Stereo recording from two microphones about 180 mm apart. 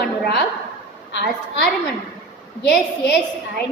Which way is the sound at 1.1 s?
70° left (ahead or behind).